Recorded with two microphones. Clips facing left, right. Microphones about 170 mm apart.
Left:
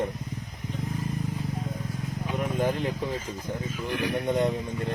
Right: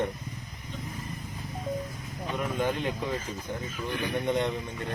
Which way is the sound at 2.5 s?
35° left (ahead or behind).